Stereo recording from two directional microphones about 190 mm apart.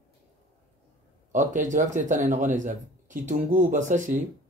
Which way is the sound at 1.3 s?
40° right (ahead or behind).